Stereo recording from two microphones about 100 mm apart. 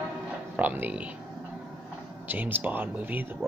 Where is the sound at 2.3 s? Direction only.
20° right (ahead or behind).